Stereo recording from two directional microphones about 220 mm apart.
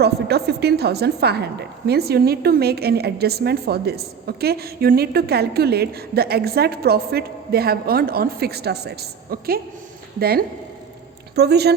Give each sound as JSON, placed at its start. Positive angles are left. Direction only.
{"t": 0.0, "sound": "a woman's voice", "side_deg": -50}